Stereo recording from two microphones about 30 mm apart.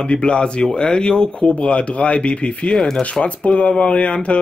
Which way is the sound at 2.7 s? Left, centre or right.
Centre.